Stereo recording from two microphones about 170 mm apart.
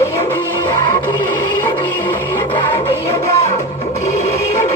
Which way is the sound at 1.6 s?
10° left (ahead or behind).